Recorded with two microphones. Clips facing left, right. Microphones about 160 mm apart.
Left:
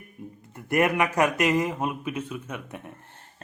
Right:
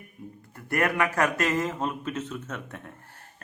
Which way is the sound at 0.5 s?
20° left (ahead or behind).